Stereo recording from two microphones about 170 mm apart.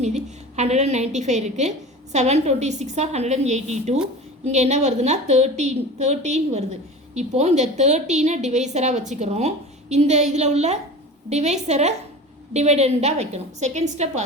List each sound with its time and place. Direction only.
0.0 s a woman's voice: 40° right (ahead or behind)